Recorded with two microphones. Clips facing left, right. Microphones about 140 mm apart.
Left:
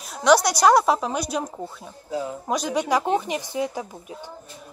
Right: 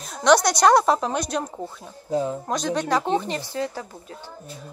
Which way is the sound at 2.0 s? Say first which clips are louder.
Right 4 dB; 40° right (ahead or behind).